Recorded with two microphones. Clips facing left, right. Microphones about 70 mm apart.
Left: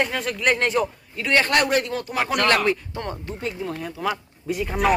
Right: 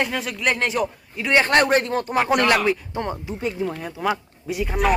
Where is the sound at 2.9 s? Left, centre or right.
Centre.